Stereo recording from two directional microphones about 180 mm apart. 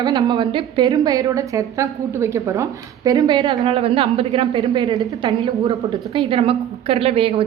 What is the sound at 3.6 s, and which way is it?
Speech, 35° right (ahead or behind).